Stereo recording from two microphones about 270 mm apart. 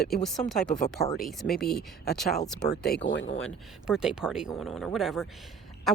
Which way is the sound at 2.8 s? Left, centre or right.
Left.